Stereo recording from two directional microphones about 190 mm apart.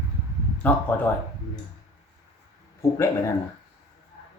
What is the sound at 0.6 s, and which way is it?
Speech, 10° left (ahead or behind).